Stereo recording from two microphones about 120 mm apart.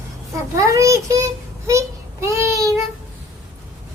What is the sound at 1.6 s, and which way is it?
Child singing, 25° right (ahead or behind).